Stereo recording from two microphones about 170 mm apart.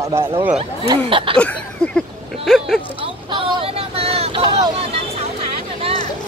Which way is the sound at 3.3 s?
30° right (ahead or behind).